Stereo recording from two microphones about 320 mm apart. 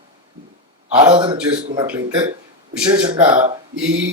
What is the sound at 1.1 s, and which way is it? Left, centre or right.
Speech, centre.